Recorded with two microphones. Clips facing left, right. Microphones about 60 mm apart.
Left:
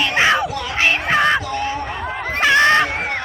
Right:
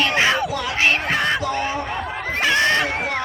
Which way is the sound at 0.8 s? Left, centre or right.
Left.